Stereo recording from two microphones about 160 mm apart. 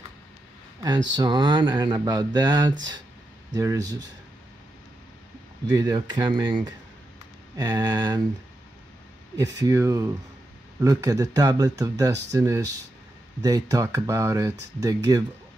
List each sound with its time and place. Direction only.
0.8 s speech: 25° right (ahead or behind)
5.7 s speech: 25° right (ahead or behind)
9.4 s speech: 20° right (ahead or behind)